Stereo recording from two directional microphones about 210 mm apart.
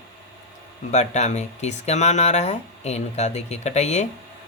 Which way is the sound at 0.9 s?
35° left (ahead or behind).